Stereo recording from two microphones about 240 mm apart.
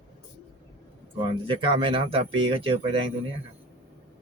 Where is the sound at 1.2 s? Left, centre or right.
Right.